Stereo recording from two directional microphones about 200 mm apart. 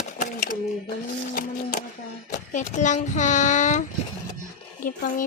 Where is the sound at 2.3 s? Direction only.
35° left (ahead or behind).